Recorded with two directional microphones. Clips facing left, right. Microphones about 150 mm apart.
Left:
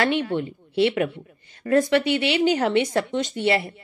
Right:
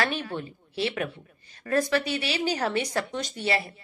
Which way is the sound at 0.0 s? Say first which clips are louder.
Left 7 dB; 25° left (ahead or behind).